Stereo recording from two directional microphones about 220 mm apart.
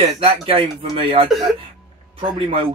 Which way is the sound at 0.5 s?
25° right (ahead or behind).